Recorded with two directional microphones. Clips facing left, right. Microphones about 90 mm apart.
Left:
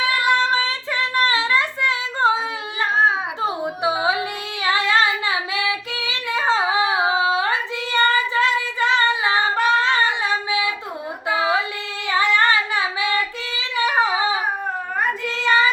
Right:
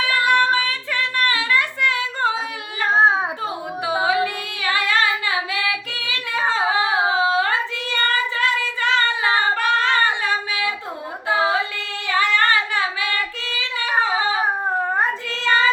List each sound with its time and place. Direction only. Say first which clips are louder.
0.0 s child singing: right 1 dB; 20° left (ahead or behind)
1.1 s singing: left 2 dB; 20° left (ahead or behind)
2.9 s a sound: right 3 dB; 30° right (ahead or behind)
4.0 s singing: right 2 dB; 20° left (ahead or behind)
12.0 s singing: left 1 dB; 20° left (ahead or behind)
15.3 s child singing: left 2 dB; 20° left (ahead or behind)